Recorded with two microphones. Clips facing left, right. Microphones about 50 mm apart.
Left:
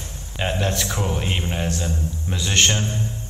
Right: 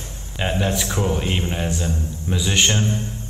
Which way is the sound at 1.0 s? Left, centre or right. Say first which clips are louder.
Right 4 dB; centre.